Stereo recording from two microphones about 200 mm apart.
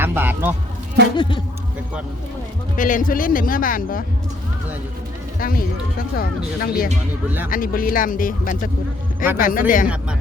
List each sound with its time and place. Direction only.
0.0 s speech: 10° right (ahead or behind)
1.1 s speech: 25° left (ahead or behind)
2.7 s speech: 40° left (ahead or behind)
5.4 s speech: 45° left (ahead or behind)
7.3 s speech: 10° right (ahead or behind)
7.5 s speech: 45° left (ahead or behind)
9.8 s speech: 5° right (ahead or behind)